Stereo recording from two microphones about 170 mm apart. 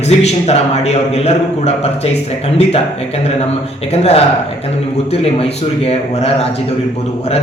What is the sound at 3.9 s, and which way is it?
Speech, 35° left (ahead or behind).